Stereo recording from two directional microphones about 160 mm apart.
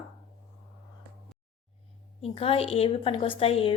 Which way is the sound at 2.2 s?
35° left (ahead or behind).